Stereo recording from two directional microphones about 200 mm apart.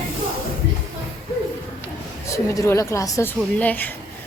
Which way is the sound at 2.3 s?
15° left (ahead or behind).